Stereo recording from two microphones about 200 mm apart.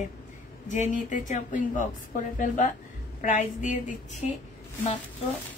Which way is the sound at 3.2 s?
40° left (ahead or behind).